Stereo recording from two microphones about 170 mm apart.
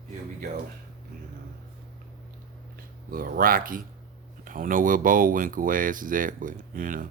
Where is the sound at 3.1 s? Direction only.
55° right (ahead or behind).